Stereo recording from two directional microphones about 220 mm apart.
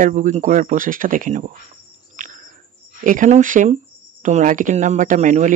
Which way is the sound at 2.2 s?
35° right (ahead or behind).